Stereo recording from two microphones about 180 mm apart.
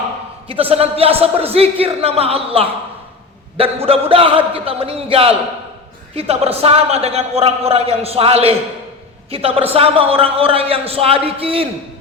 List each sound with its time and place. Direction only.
0.4 s speech: 30° right (ahead or behind)